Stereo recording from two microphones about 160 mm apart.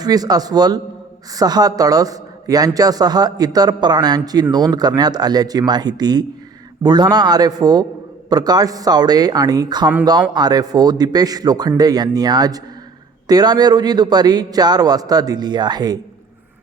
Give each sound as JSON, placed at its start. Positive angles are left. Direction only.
{"t": 0.0, "sound": "a man's voice", "side_deg": -25}